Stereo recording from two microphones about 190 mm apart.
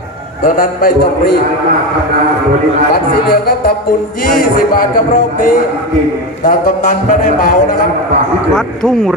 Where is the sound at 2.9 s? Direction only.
55° left (ahead or behind).